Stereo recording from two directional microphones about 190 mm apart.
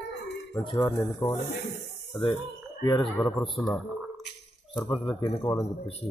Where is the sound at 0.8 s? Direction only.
15° left (ahead or behind).